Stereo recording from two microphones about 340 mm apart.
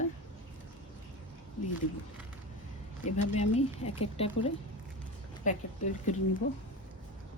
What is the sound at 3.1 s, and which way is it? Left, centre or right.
Speech, centre.